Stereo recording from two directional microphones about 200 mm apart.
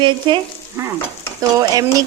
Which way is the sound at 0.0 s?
25° right (ahead or behind).